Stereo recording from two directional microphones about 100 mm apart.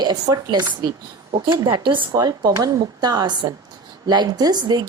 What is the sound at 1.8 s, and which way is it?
Speech, 55° right (ahead or behind).